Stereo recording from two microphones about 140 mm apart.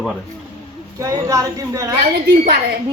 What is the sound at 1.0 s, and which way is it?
Speech, 20° right (ahead or behind).